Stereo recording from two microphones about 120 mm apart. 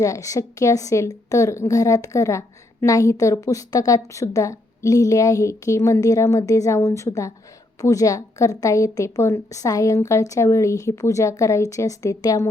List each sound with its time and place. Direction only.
0.0 s a woman's voice: 25° left (ahead or behind)